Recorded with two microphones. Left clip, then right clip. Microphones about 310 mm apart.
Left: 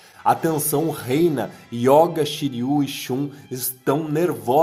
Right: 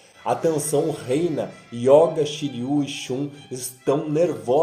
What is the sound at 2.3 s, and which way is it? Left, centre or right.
Speech, left.